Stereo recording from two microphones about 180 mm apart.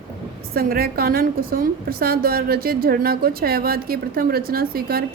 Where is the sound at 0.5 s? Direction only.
55° right (ahead or behind).